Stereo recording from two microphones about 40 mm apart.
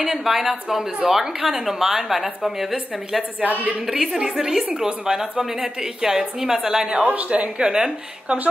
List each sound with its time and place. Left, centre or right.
0.0 s a woman's voice: centre
7.0 s a woman's voice: right; by 8.4 s centre